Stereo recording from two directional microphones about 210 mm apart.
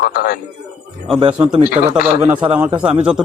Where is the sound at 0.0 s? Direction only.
45° left (ahead or behind).